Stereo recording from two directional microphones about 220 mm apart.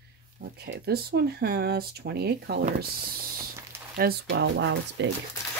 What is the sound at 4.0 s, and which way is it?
Speech, 45° right (ahead or behind).